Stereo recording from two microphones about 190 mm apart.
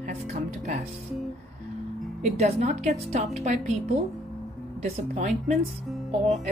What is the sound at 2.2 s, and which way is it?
A woman's voice, 35° right (ahead or behind).